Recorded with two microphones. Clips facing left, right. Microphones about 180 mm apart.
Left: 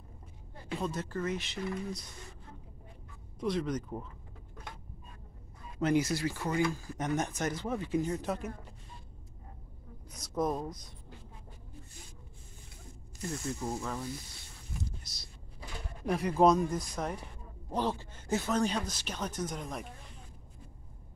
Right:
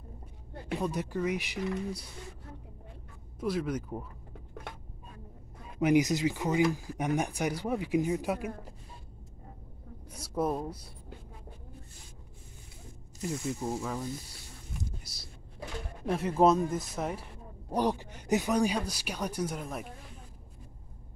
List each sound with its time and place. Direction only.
0.7 s speech: 15° right (ahead or behind)
3.3 s speech: 5° right (ahead or behind)
5.8 s speech: 15° right (ahead or behind)
10.1 s speech: 10° right (ahead or behind)
13.2 s speech: 5° right (ahead or behind)
16.1 s speech: 5° right (ahead or behind)